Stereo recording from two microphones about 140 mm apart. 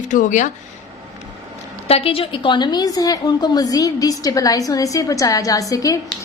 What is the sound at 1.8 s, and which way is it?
A woman's voice, 45° left (ahead or behind).